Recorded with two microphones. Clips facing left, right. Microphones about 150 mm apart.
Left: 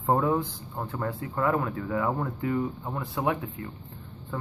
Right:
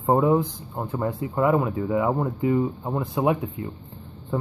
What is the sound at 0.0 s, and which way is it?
Speech, 20° right (ahead or behind).